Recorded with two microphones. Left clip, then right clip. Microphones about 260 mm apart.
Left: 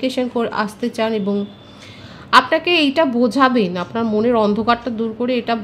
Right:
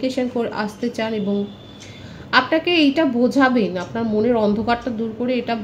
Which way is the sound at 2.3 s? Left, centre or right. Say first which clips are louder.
Left 4 dB; left.